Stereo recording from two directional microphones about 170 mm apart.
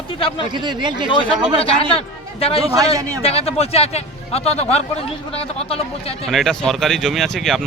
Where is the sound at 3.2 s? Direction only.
35° left (ahead or behind).